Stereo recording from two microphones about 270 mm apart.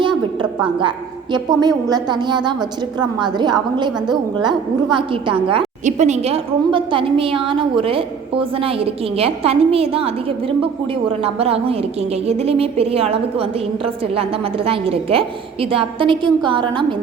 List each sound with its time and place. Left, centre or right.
0.8 s a woman's voice: centre